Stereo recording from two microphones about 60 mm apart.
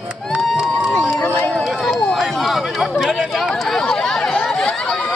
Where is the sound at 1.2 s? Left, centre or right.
Left.